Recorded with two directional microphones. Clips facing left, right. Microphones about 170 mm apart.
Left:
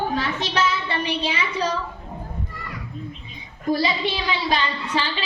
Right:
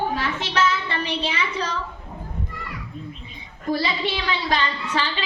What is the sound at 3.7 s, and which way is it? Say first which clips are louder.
Speech: left 2 dB; 15° left (ahead or behind).